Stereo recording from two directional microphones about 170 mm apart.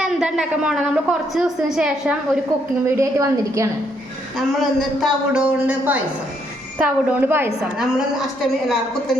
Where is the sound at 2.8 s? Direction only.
15° right (ahead or behind).